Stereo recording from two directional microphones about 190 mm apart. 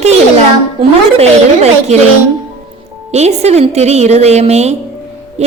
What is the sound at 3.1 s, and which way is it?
A child's voice, 35° right (ahead or behind).